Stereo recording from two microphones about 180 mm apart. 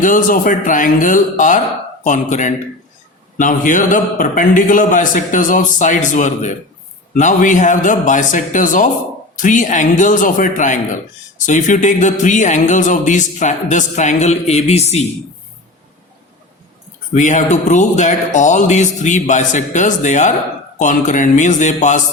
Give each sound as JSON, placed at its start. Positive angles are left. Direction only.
{"t": 0.0, "sound": "speech", "side_deg": 50}
{"t": 17.2, "sound": "speech", "side_deg": 45}